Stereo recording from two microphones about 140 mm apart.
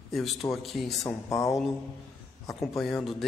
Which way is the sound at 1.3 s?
20° left (ahead or behind).